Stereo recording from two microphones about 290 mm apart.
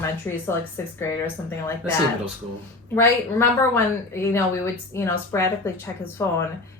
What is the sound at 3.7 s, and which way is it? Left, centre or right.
A woman's voice, centre.